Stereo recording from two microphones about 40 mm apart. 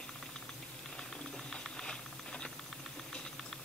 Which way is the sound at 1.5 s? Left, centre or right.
Centre.